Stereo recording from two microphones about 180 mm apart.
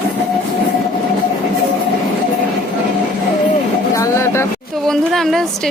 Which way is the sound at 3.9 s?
15° left (ahead or behind).